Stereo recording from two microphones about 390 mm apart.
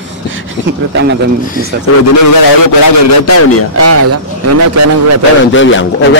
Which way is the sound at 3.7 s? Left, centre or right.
Right.